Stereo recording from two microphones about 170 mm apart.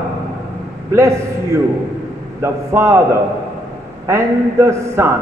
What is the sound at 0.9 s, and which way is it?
Speech, 15° right (ahead or behind).